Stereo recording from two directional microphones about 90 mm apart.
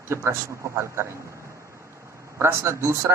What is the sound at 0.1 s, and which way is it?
Speech, 30° right (ahead or behind).